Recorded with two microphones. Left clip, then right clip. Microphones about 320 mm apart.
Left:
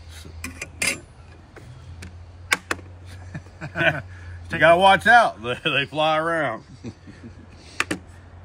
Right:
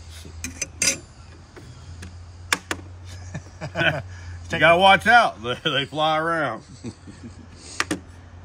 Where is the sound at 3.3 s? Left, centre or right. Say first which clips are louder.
Right 1 dB; right.